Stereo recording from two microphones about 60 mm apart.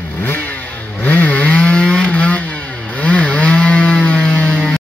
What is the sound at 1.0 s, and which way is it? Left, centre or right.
Chainsaw, left.